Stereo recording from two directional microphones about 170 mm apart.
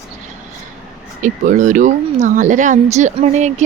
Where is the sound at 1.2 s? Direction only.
50° right (ahead or behind).